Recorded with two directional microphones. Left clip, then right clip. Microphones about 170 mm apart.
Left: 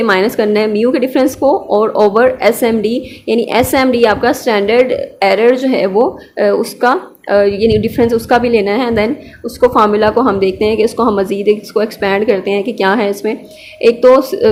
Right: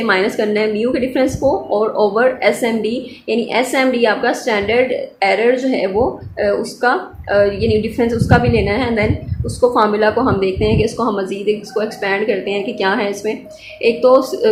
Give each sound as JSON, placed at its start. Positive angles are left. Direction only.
{"t": 0.0, "sound": "speech", "side_deg": 40}